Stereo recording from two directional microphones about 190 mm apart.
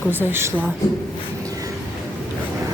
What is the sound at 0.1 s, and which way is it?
Speech, 10° right (ahead or behind).